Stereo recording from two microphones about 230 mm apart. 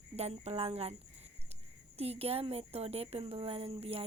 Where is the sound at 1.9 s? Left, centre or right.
Right.